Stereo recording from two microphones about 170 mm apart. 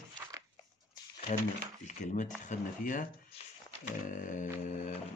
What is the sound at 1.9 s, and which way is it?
Speech, 45° left (ahead or behind).